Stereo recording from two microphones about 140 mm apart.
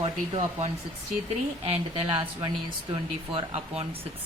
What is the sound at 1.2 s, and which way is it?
Speech, 45° right (ahead or behind).